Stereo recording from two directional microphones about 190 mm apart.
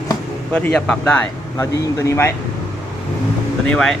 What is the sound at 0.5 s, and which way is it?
Speech, 5° left (ahead or behind).